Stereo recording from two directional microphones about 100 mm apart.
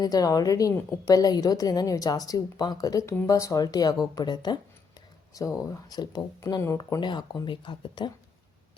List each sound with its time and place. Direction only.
0.0 s a woman's voice: 40° left (ahead or behind)
0.7 s a woman's voice: 25° left (ahead or behind)
1.1 s a woman's voice: 40° left (ahead or behind)
5.3 s a woman's voice: 35° left (ahead or behind); by 8.1 s 55° left (ahead or behind)